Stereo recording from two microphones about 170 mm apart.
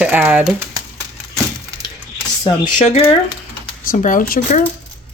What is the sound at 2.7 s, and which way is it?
Speech, 40° left (ahead or behind).